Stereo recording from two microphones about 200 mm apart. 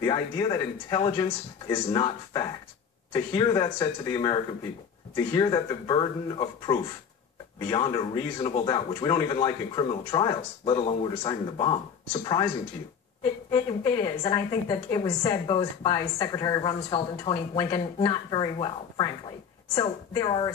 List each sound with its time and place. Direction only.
0.0 s a woman's voice: 20° left (ahead or behind)